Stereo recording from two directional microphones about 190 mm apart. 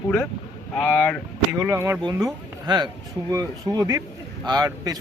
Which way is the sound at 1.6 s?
15° right (ahead or behind).